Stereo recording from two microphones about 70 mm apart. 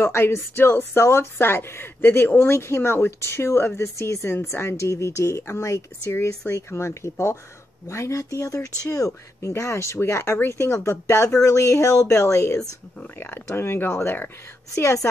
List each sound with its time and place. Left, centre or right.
0.0 s speech: left
13.0 s speech: left